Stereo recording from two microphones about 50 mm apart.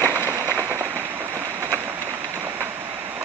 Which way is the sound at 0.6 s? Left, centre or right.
Right.